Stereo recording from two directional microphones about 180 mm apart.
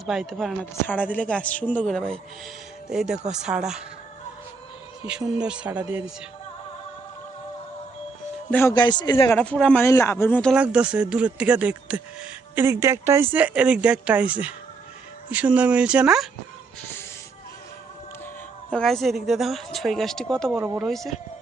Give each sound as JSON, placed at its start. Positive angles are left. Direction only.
{"t": 0.0, "sound": "speech", "side_deg": 0}
{"t": 5.4, "sound": "speech", "side_deg": -5}
{"t": 8.4, "sound": "speech", "side_deg": 10}
{"t": 8.7, "sound": "a man's voice", "side_deg": 25}
{"t": 9.3, "sound": "speech", "side_deg": 5}
{"t": 10.5, "sound": "speech", "side_deg": -5}
{"t": 18.7, "sound": "speech", "side_deg": 5}